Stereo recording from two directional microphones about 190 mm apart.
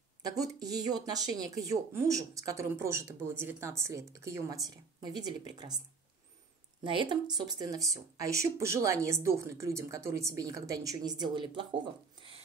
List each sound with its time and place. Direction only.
0.3 s speech: 20° right (ahead or behind)
6.8 s speech: 25° right (ahead or behind)
12.2 s a sound: 25° right (ahead or behind)